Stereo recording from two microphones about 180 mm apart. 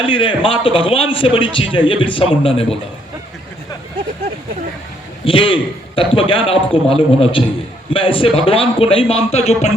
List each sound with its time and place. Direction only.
0.0 s a man's voice: 30° left (ahead or behind)
5.2 s a man's voice: 30° left (ahead or behind)